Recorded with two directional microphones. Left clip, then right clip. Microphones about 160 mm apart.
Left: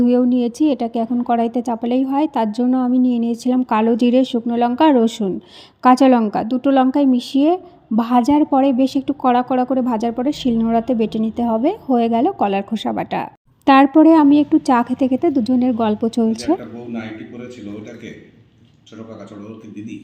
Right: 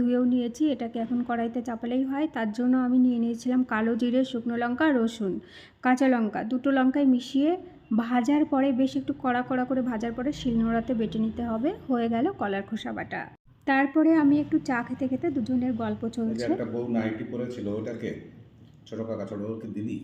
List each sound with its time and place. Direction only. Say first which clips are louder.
0.3 s a woman's voice: left 9 dB; 25° left (ahead or behind)